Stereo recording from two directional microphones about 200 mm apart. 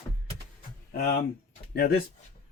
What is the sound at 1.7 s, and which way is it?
Speech, 50° left (ahead or behind).